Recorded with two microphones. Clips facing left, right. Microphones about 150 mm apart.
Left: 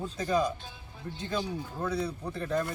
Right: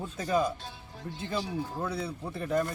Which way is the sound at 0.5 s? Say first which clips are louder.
Right 3 dB; 80° right.